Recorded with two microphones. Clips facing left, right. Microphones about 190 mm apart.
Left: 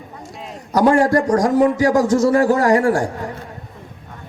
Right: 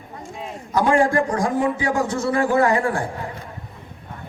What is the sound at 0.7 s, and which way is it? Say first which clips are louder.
A man's voice: left 4 dB; 40° left (ahead or behind).